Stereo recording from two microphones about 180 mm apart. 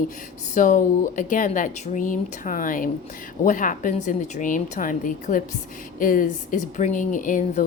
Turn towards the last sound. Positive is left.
turn(degrees=45)  # may be behind; listen again after turning